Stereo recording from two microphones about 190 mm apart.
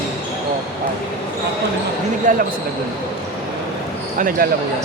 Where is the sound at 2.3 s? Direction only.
45° right (ahead or behind).